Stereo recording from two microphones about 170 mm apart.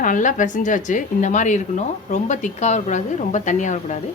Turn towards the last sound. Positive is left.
turn(degrees=45)  # may be behind; listen again after turning